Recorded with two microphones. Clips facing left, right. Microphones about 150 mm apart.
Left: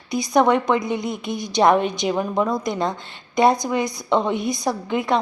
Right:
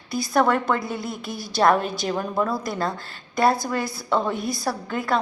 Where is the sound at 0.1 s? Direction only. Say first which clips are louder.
Left 3 dB; 20° left (ahead or behind).